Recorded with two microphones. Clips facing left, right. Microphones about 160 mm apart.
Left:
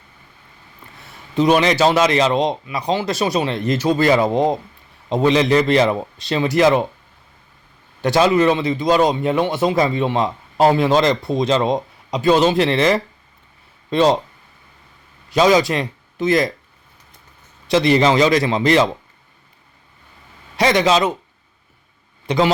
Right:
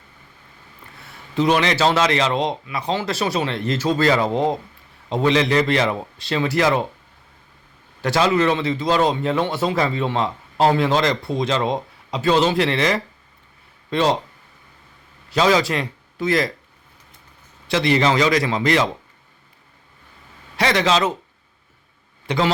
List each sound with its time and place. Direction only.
1.4 s a man's voice: 20° left (ahead or behind)
8.0 s a man's voice: 20° left (ahead or behind)
15.3 s speech: 15° left (ahead or behind)
17.7 s a man's voice: 20° left (ahead or behind)
20.6 s a man's voice: 20° left (ahead or behind)
22.3 s a man's voice: 15° left (ahead or behind)